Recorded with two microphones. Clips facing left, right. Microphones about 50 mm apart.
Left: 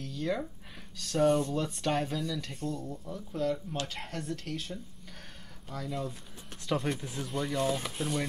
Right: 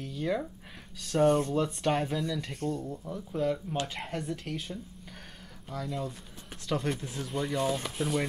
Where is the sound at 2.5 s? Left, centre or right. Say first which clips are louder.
Right 3 dB; right.